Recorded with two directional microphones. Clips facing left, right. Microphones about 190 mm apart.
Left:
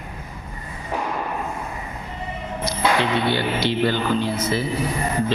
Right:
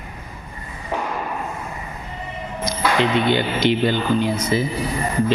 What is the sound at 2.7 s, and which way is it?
Speech, 20° right (ahead or behind).